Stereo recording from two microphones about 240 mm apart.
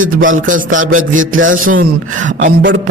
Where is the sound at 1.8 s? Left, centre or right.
Right.